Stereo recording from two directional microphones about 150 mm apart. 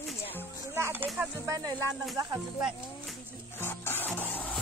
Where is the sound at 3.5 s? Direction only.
15° left (ahead or behind).